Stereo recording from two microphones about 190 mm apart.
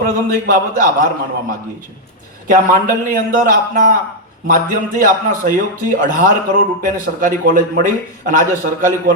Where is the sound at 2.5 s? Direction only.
45° right (ahead or behind).